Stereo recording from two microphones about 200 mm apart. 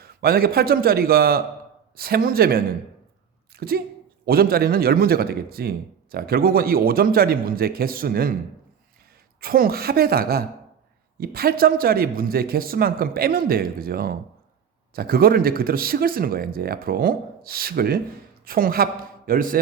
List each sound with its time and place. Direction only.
0.0 s a man's voice: 50° right (ahead or behind)
9.4 s a man's voice: 45° right (ahead or behind)